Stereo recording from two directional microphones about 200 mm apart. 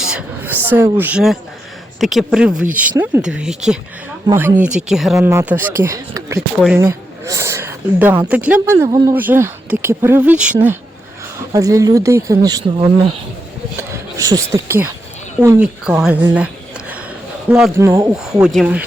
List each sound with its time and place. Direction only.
0.0 s speech: 5° right (ahead or behind); by 12.9 s 20° right (ahead or behind)
14.2 s speech: 15° right (ahead or behind)
15.6 s speech: 5° right (ahead or behind)
17.5 s speech: 10° right (ahead or behind)
18.1 s speech: 5° right (ahead or behind)